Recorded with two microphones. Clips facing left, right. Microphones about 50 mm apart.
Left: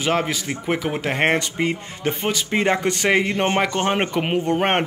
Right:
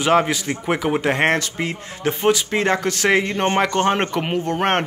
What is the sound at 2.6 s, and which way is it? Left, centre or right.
A man's voice, centre.